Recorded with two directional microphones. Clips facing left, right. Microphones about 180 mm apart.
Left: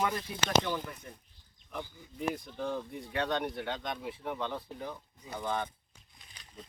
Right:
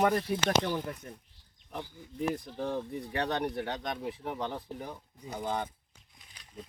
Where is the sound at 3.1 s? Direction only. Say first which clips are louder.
Even; 40° right (ahead or behind).